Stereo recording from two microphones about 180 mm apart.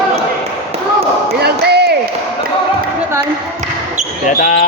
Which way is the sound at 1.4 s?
65° right (ahead or behind).